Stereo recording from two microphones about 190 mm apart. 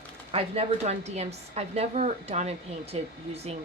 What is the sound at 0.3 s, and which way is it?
A woman's voice, 30° right (ahead or behind).